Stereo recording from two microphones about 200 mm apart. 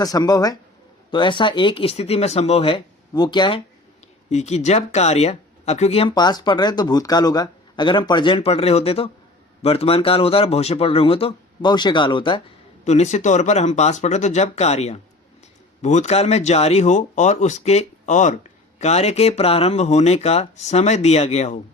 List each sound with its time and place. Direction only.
0.0 s speech: 20° left (ahead or behind)
4.3 s speech: 35° left (ahead or behind)
12.8 s speech: 35° left (ahead or behind)